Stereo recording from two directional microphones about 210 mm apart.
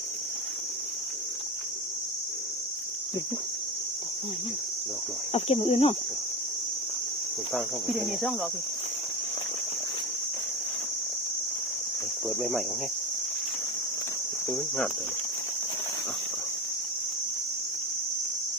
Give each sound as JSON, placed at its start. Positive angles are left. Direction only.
{"t": 5.3, "sound": "speech", "side_deg": 30}
{"t": 7.5, "sound": "speech", "side_deg": 0}
{"t": 12.4, "sound": "speech", "side_deg": 0}